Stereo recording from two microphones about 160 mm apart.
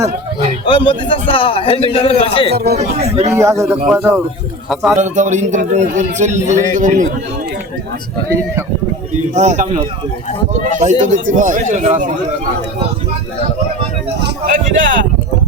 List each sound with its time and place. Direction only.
0.6 s a man's voice: 30° left (ahead or behind)
2.7 s speech: 40° right (ahead or behind)
3.3 s a man's voice: 20° right (ahead or behind)
4.7 s a man's voice: centre (ahead or behind)
4.9 s a man's voice: 50° right (ahead or behind)
9.3 s a man's voice: 50° right (ahead or behind)
14.4 s speech: 55° right (ahead or behind)